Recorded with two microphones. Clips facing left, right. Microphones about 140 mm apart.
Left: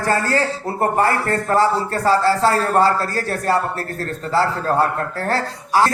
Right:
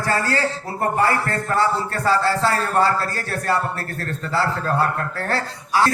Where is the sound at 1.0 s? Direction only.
40° left (ahead or behind).